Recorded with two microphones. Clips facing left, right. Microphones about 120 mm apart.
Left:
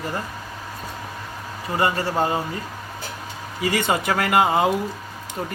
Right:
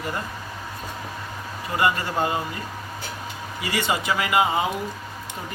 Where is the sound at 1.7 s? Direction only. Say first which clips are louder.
Left 1 dB; 35° left (ahead or behind).